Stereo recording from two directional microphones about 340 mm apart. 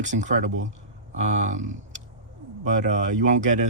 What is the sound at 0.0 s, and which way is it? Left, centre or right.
Speech, right.